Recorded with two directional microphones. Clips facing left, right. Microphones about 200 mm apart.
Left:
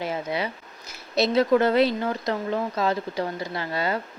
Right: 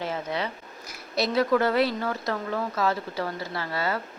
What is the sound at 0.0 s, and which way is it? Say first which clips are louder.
Speech: left 2 dB; 10° left (ahead or behind).